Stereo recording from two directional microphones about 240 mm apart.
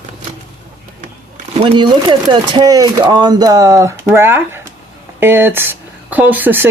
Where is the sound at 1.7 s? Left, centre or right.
Centre.